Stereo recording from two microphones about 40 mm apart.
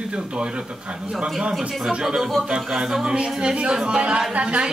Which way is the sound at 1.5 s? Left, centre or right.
Centre.